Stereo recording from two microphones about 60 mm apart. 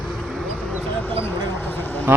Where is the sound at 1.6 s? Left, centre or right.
Left.